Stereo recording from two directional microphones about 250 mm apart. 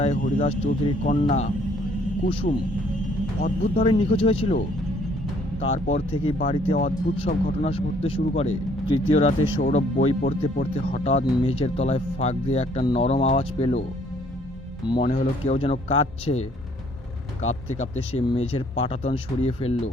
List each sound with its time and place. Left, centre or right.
0.0 s speech: left
3.4 s speech: left
3.9 s speech: left
5.7 s speech: left
14.8 s speech: centre
17.4 s speech: left
18.1 s speech: left